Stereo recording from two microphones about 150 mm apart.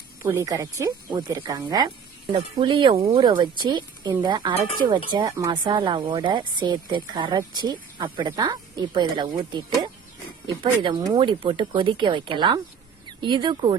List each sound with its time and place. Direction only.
0.2 s speech: 15° right (ahead or behind); by 13.7 s 30° right (ahead or behind)